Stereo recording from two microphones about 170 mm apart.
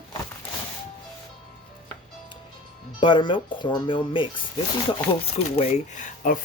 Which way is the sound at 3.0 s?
30° left (ahead or behind).